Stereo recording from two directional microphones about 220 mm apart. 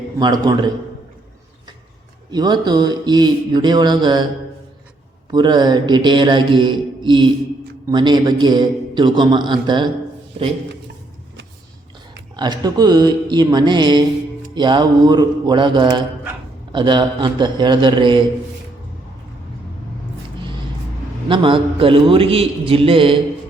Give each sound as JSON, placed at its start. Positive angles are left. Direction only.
{"t": 0.2, "sound": "a man's voice", "side_deg": -20}
{"t": 2.3, "sound": "a man's voice", "side_deg": -20}
{"t": 5.3, "sound": "a man's voice", "side_deg": -20}
{"t": 12.4, "sound": "a man's voice", "side_deg": -20}
{"t": 21.2, "sound": "a man's voice", "side_deg": -20}